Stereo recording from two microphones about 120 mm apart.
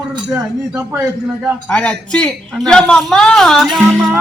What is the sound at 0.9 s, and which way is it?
Speech, 15° right (ahead or behind).